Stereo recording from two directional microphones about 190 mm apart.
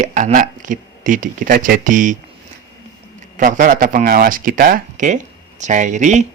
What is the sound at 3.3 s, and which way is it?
Speech, 45° right (ahead or behind).